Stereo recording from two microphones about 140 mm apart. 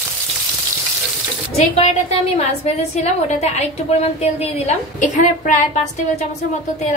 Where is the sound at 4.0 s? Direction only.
50° left (ahead or behind).